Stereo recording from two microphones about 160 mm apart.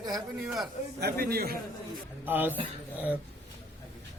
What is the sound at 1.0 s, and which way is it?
Speech, 75° right (ahead or behind).